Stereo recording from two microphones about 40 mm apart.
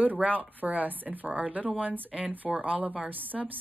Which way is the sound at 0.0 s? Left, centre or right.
Right.